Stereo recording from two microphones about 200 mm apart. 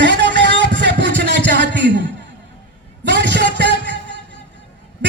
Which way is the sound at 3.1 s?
60° right (ahead or behind).